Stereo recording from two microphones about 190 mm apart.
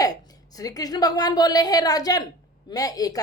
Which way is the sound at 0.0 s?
20° left (ahead or behind).